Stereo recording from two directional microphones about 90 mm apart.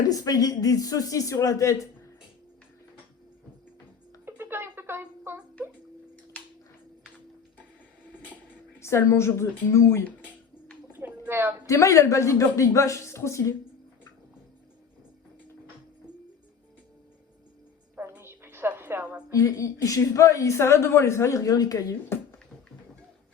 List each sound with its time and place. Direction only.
0.1 s a woman's voice: 45° left (ahead or behind)
4.3 s a sound: 25° right (ahead or behind)
8.8 s a woman's voice: 30° left (ahead or behind)
11.3 s a woman's voice: 25° right (ahead or behind)
11.6 s a woman's voice: 40° left (ahead or behind)
18.1 s music: 25° right (ahead or behind)
19.3 s a woman's voice: 40° left (ahead or behind)